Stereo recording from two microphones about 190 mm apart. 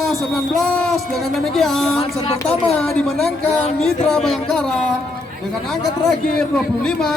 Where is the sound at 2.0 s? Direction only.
35° left (ahead or behind).